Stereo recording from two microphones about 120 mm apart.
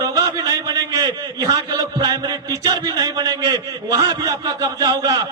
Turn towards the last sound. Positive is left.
turn(degrees=-35)  # may be behind; listen again after turning